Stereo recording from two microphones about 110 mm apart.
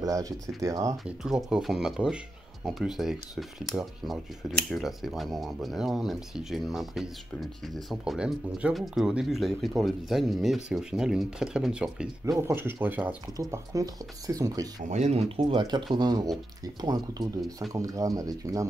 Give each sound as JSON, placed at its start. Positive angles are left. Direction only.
{"t": 0.0, "sound": "speech", "side_deg": -30}
{"t": 1.0, "sound": "speech", "side_deg": -5}
{"t": 12.3, "sound": "speech", "side_deg": -25}
{"t": 13.4, "sound": "speech", "side_deg": -30}
{"t": 14.9, "sound": "speech", "side_deg": -85}
{"t": 15.6, "sound": "speech", "side_deg": -40}